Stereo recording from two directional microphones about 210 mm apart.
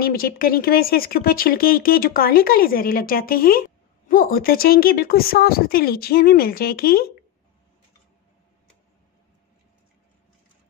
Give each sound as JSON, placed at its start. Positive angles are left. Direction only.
{"t": 0.0, "sound": "speech", "side_deg": 45}